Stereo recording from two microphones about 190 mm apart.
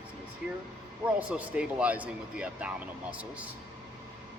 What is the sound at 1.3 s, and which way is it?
Speech, 5° right (ahead or behind).